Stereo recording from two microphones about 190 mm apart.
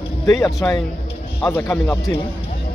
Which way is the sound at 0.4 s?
15° left (ahead or behind).